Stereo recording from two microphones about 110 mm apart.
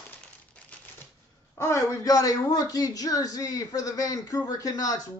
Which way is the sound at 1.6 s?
30° left (ahead or behind).